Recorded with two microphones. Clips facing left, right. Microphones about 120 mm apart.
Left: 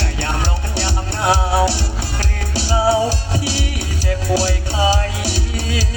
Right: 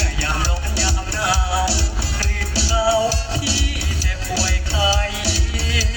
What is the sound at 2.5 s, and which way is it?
Music, 50° left (ahead or behind).